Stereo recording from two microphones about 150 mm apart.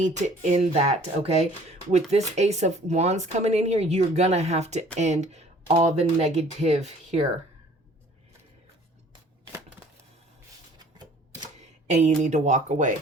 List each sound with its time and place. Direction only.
0.0 s speech: 50° right (ahead or behind)
10.8 s typewriter: 25° right (ahead or behind)
11.9 s speech: 50° right (ahead or behind)